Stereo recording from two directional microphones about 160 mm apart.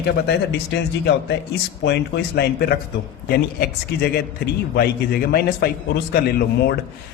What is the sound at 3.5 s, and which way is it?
A man's voice, 75° left (ahead or behind).